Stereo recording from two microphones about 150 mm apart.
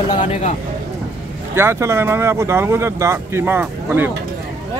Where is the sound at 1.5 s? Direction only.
15° right (ahead or behind).